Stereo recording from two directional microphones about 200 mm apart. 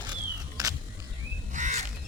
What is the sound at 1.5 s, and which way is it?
Crow, 35° right (ahead or behind).